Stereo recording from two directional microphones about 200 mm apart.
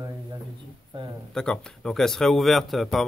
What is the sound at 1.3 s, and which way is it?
Speech, 5° left (ahead or behind).